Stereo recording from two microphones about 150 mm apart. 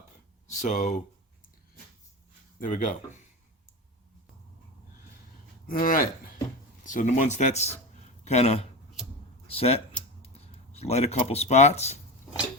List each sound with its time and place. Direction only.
0.6 s speech: 55° left (ahead or behind)
2.6 s speech: 60° left (ahead or behind)
5.6 s speech: 70° left (ahead or behind)
6.8 s speech: 60° left (ahead or behind)